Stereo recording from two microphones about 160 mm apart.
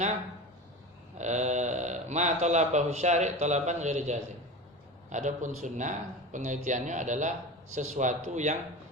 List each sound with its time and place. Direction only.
1.2 s speech: 45° right (ahead or behind)